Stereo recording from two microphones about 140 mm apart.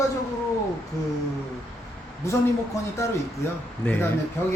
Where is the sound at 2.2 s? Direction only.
20° left (ahead or behind).